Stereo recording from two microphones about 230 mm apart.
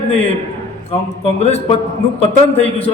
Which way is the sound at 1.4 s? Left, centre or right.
Left.